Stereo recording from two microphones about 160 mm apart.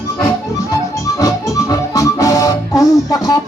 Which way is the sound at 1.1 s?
20° left (ahead or behind).